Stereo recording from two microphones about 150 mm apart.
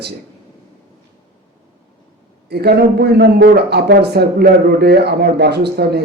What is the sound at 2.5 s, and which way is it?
Speech, 90° right.